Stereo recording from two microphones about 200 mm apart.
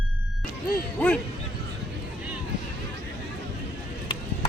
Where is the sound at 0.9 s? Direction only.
5° left (ahead or behind).